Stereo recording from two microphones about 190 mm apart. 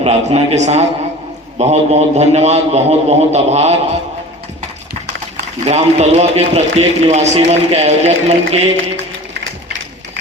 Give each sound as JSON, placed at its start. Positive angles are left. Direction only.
{"t": 0.0, "sound": "a man's voice", "side_deg": -35}
{"t": 5.6, "sound": "a man's voice", "side_deg": -35}